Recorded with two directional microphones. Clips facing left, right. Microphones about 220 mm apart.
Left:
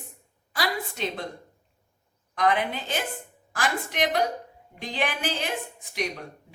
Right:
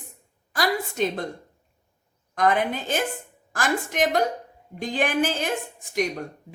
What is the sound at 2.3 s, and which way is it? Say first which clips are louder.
Speech: right 3 dB; 45° right (ahead or behind).